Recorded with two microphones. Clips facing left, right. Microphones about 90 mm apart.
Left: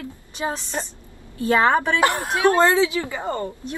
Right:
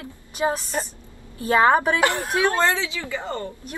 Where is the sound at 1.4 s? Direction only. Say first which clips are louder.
Right 1 dB; 25° right (ahead or behind).